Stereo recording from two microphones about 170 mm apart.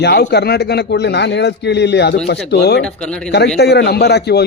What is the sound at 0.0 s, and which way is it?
A man's voice, 80° left.